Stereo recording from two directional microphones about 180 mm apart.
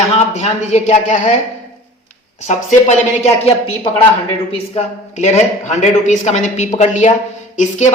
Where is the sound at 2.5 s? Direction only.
40° left (ahead or behind).